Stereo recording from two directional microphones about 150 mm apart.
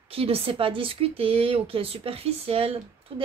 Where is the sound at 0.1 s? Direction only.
40° right (ahead or behind).